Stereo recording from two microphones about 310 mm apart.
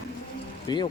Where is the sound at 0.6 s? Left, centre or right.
Centre.